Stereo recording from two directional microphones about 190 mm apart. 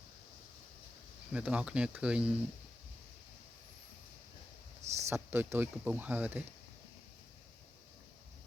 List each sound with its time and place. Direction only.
1.3 s speech: 5° right (ahead or behind)
4.8 s a sound: 35° right (ahead or behind)
5.0 s speech: 15° right (ahead or behind)